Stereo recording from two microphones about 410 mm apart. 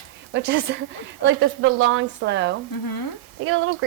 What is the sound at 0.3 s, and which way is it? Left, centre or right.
A woman's voice, right.